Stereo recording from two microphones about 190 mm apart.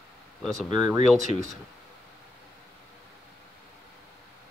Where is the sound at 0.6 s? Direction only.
20° right (ahead or behind).